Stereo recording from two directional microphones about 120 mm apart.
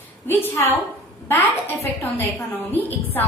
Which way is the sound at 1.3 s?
20° left (ahead or behind).